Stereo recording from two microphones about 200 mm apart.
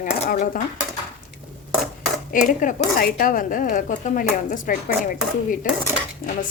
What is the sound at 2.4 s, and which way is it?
Speech, 40° left (ahead or behind).